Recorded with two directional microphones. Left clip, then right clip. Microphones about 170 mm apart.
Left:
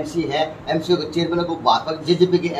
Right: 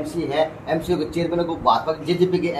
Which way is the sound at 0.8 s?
15° left (ahead or behind).